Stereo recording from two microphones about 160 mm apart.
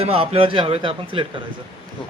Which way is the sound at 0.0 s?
35° right (ahead or behind).